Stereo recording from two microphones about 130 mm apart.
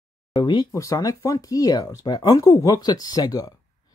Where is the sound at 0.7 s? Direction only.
25° left (ahead or behind).